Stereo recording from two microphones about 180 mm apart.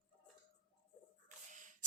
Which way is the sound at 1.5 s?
45° right (ahead or behind).